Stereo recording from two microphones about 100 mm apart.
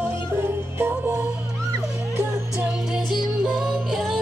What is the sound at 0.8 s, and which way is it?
Music, 20° right (ahead or behind).